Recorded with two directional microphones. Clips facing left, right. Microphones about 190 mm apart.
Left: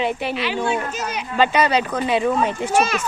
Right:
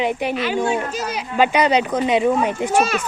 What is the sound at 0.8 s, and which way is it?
Speech, 35° right (ahead or behind).